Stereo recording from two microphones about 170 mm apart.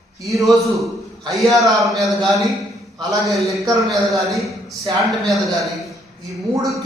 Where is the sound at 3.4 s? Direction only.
20° right (ahead or behind).